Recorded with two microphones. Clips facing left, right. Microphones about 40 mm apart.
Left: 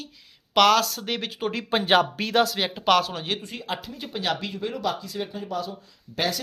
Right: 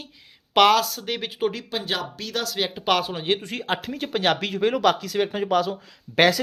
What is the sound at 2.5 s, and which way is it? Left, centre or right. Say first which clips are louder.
Speech: left 1 dB; centre.